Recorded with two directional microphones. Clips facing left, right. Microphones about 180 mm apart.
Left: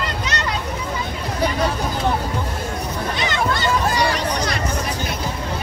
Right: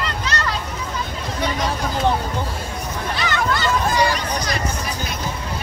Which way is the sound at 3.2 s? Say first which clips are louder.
Right 1 dB; 25° left (ahead or behind).